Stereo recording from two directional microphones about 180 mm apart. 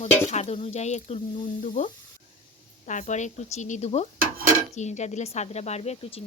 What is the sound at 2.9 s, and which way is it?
Speech, 45° left (ahead or behind).